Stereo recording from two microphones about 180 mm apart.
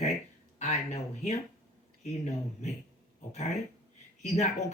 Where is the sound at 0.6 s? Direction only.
40° left (ahead or behind).